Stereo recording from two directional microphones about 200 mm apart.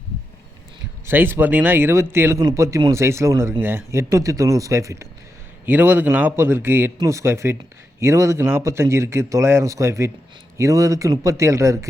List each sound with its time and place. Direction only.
1.0 s speech: 10° right (ahead or behind)